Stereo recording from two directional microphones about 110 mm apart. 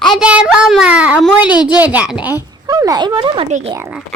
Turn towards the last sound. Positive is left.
turn(degrees=-90)